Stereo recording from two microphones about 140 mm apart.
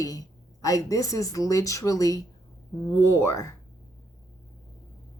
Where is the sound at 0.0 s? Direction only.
25° left (ahead or behind).